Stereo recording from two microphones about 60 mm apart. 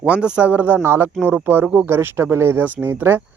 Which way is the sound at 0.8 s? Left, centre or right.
Right.